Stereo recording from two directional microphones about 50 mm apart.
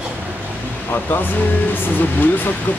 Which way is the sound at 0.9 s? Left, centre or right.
Left.